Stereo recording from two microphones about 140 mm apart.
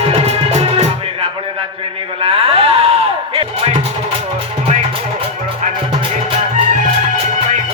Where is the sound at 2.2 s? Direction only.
45° right (ahead or behind).